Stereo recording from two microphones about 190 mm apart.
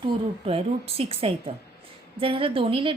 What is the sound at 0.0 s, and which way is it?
A woman's voice, 30° right (ahead or behind).